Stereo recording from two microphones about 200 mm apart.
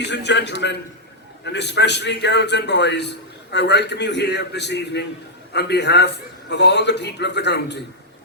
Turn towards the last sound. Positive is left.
turn(degrees=60)  # may be behind; listen again after turning